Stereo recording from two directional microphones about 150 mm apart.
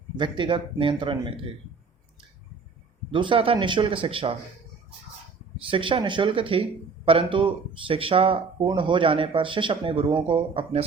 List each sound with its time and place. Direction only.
0.2 s speech: 30° right (ahead or behind)
3.1 s speech: 35° right (ahead or behind)
5.6 s speech: 35° right (ahead or behind)